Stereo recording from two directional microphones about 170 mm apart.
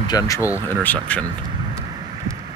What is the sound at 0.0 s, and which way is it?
Speech, 20° left (ahead or behind).